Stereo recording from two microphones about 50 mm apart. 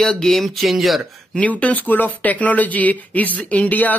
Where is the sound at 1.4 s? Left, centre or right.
Left.